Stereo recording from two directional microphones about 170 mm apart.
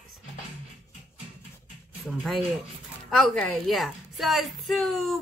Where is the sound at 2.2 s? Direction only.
Centre (ahead or behind).